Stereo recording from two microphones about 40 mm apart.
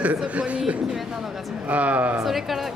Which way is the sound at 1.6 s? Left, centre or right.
Right.